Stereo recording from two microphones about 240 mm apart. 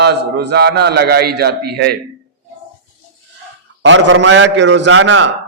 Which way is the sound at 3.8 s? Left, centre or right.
Right.